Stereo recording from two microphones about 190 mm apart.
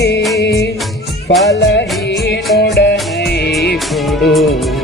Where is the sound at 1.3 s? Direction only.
70° left (ahead or behind).